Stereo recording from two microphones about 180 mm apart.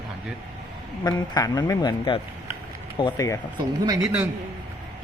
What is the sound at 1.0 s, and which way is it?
Speech, 20° left (ahead or behind).